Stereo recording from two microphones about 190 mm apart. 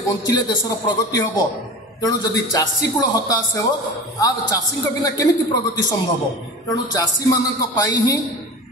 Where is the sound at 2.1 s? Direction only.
20° left (ahead or behind).